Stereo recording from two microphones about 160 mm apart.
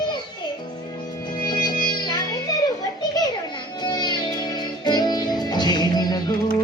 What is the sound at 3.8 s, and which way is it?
Music, 25° left (ahead or behind).